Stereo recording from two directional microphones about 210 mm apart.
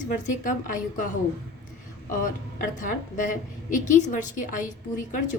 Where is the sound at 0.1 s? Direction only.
40° left (ahead or behind).